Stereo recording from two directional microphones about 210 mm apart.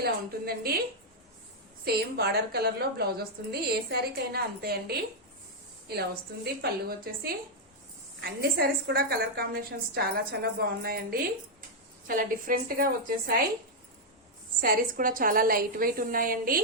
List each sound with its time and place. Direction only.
0.0 s a woman's voice: 45° right (ahead or behind)
1.8 s a woman's voice: 50° right (ahead or behind)
8.9 s a woman's voice: 45° right (ahead or behind)
14.6 s a woman's voice: 40° right (ahead or behind)